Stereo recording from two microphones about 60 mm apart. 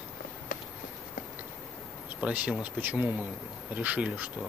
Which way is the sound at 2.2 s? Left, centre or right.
Centre.